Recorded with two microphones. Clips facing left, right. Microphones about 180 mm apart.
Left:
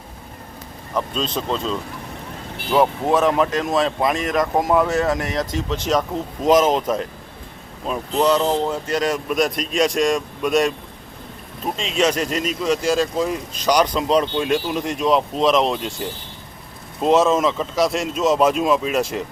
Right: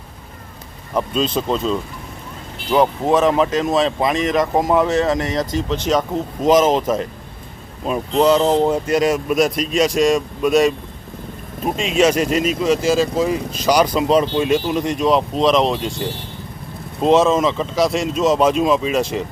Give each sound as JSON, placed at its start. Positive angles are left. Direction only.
{"t": 0.9, "sound": "speech", "side_deg": -5}
{"t": 2.7, "sound": "speech", "side_deg": 0}
{"t": 8.4, "sound": "speech", "side_deg": -25}
{"t": 8.9, "sound": "speech", "side_deg": -10}